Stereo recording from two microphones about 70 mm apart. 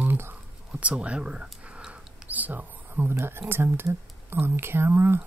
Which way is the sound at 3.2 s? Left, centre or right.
Right.